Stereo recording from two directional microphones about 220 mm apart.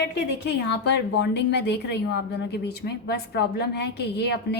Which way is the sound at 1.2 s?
50° left (ahead or behind).